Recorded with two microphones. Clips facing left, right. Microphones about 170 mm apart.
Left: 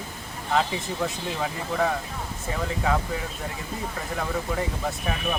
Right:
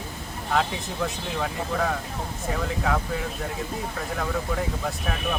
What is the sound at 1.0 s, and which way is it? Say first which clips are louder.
Speech: right 2 dB; centre (ahead or behind).